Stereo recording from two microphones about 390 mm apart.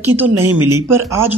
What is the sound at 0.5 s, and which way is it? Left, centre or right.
Speech, right.